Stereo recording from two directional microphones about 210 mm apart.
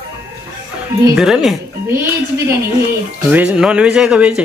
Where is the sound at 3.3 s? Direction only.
5° right (ahead or behind).